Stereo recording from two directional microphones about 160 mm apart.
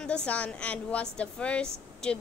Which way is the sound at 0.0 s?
5° left (ahead or behind).